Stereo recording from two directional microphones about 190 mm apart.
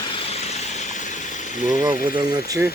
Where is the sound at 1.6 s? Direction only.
20° right (ahead or behind).